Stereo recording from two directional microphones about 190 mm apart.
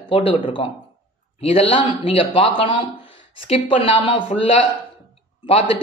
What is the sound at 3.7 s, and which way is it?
Speech, 30° left (ahead or behind).